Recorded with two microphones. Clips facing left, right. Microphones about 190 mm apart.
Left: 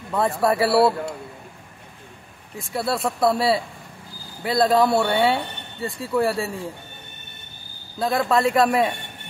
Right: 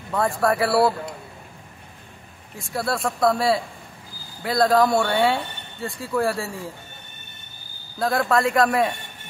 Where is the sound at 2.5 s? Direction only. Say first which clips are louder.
Left 1 dB; centre (ahead or behind).